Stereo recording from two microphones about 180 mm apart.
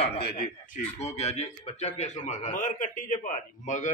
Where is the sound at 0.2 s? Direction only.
65° left (ahead or behind).